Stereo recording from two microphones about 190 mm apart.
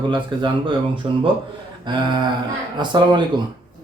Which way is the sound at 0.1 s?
25° right (ahead or behind).